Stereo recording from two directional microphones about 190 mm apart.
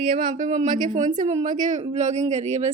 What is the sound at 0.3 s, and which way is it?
A woman's voice, 40° right (ahead or behind).